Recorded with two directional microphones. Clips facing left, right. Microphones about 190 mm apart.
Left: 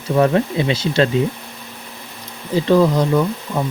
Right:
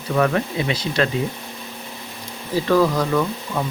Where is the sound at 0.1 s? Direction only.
30° left (ahead or behind).